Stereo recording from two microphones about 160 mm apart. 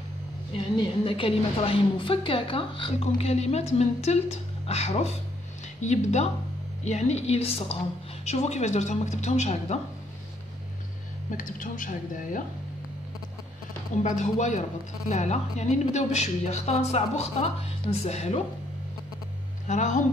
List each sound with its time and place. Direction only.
0.7 s a woman's voice: 35° left (ahead or behind)
11.2 s speech: 55° left (ahead or behind)
13.9 s a woman's voice: 50° left (ahead or behind)
19.7 s a woman's voice: 50° left (ahead or behind)